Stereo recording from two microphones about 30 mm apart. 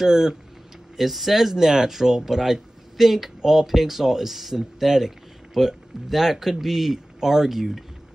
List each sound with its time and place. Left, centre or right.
0.0 s speech: centre
0.9 s speech: centre